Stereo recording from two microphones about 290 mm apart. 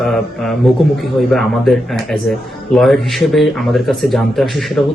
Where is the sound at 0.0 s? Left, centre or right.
Centre.